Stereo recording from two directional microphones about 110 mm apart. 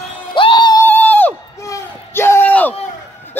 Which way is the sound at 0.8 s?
15° left (ahead or behind).